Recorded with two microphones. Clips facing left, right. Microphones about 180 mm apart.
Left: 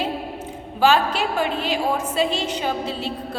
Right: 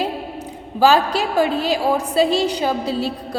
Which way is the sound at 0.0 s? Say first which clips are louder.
Right 2 dB; 35° right (ahead or behind).